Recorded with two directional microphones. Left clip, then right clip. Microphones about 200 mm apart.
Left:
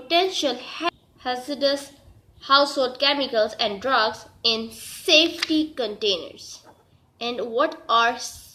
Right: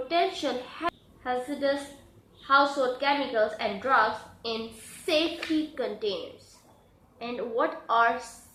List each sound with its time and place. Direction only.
0.1 s a woman's voice: 50° left (ahead or behind)
7.2 s a woman's voice: 50° left (ahead or behind)